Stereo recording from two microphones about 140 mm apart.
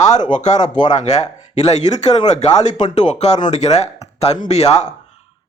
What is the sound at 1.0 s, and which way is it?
Speech, 55° left (ahead or behind).